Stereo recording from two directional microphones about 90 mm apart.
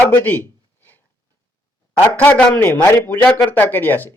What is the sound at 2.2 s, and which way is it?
A man's voice, 15° left (ahead or behind).